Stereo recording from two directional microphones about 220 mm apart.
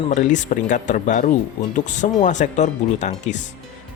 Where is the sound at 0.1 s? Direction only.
35° left (ahead or behind).